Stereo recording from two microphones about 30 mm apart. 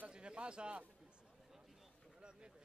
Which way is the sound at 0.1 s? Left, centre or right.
Right.